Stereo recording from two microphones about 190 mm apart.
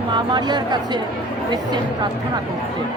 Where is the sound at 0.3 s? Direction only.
20° right (ahead or behind).